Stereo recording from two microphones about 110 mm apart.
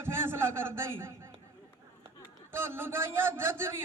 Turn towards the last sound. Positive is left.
turn(degrees=-20)  # may be behind; listen again after turning